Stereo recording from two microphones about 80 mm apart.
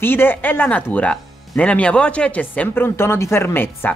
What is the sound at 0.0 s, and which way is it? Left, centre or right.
Speech, left.